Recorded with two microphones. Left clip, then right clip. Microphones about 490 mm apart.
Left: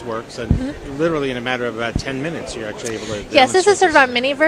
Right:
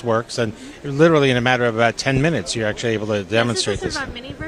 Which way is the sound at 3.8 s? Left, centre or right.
Left.